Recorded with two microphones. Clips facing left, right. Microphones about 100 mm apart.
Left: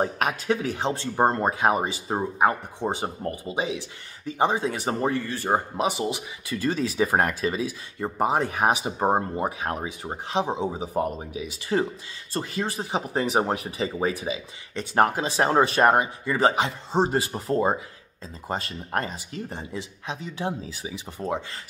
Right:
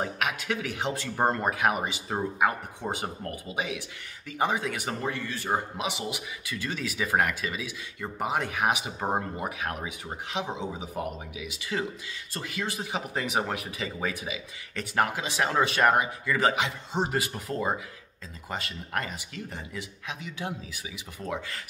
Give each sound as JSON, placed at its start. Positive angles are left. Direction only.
{"t": 0.0, "sound": "speech", "side_deg": 35}